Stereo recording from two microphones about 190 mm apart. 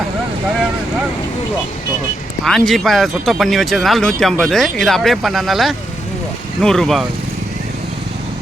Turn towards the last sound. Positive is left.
turn(degrees=0)  # may be behind; listen again after turning